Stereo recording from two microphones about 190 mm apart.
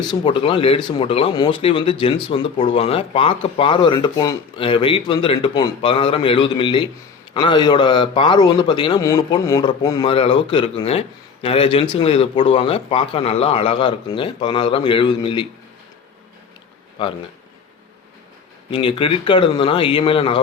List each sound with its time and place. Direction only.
0.1 s speech: 25° left (ahead or behind)
18.7 s speech: 25° left (ahead or behind)